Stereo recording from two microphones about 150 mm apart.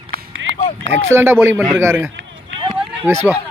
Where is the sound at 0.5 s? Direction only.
50° left (ahead or behind).